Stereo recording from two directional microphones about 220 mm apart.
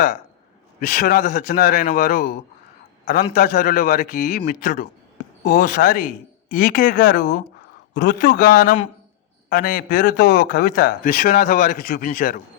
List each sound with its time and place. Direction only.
0.8 s speech: 40° left (ahead or behind)